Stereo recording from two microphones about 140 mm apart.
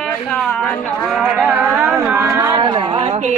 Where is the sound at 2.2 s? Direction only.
20° right (ahead or behind).